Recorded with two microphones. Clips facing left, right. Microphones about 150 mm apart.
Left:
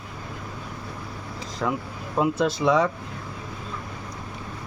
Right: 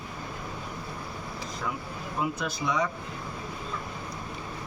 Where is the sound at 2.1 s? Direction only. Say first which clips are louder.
Left 9 dB; 90° left.